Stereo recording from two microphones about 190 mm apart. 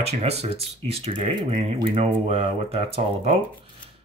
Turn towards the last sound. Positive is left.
turn(degrees=-30)  # may be behind; listen again after turning